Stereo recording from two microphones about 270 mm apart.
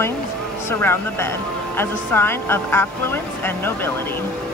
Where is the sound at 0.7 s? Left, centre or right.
Centre.